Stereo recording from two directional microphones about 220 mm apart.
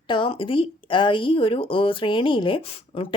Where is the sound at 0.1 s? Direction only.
25° left (ahead or behind).